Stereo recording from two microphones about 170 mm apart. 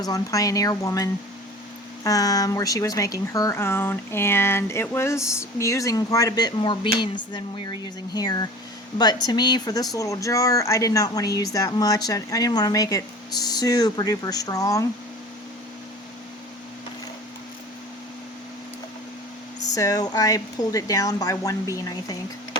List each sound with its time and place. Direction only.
0.0 s speech: 20° left (ahead or behind)
19.7 s speech: 20° left (ahead or behind)